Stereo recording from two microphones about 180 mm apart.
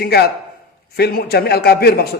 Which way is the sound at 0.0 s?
60° left (ahead or behind).